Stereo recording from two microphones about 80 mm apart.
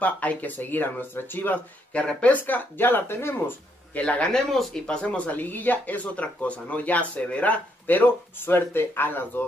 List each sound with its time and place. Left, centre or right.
0.0 s speech: centre
4.0 s speech: centre